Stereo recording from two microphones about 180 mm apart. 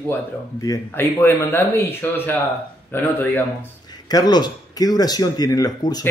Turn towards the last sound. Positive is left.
turn(degrees=20)  # may be behind; listen again after turning